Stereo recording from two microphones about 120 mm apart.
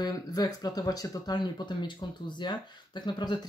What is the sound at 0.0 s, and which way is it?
Speech, 30° left (ahead or behind).